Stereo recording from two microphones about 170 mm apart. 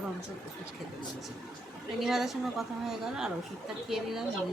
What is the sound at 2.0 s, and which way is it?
A woman's voice, centre (ahead or behind).